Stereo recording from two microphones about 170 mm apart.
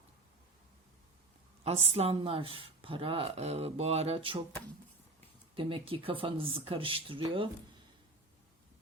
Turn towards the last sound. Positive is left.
turn(degrees=-30)  # may be behind; listen again after turning